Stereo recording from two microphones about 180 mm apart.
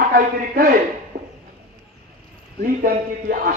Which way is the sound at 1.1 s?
60° right (ahead or behind).